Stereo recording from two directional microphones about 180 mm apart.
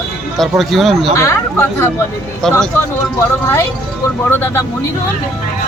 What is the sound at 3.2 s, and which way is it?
Speech, 15° left (ahead or behind).